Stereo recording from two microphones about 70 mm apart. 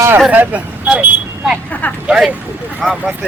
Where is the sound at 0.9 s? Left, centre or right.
Centre.